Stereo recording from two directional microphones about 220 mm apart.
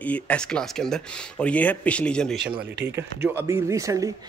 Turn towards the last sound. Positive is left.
turn(degrees=-15)  # may be behind; listen again after turning